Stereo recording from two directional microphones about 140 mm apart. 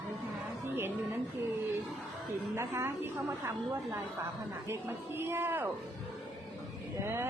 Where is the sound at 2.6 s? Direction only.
20° right (ahead or behind).